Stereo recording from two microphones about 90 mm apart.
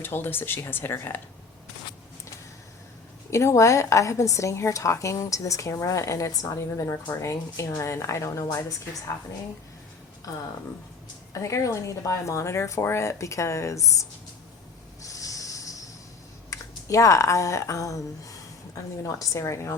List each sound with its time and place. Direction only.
0.0 s speech: 25° left (ahead or behind)
3.2 s a woman's voice: 35° left (ahead or behind)
11.3 s a woman's voice: 35° left (ahead or behind)
15.0 s a sound: 40° left (ahead or behind)
16.5 s speech: 35° left (ahead or behind)